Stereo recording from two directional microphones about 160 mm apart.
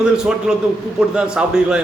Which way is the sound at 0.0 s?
5° right (ahead or behind).